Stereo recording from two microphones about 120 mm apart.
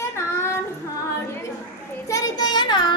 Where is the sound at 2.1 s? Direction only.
35° left (ahead or behind).